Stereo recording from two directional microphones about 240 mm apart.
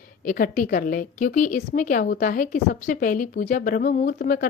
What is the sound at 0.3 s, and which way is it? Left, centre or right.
A woman's voice, left.